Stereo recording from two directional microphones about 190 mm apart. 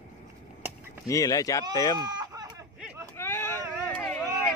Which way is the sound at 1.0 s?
15° left (ahead or behind).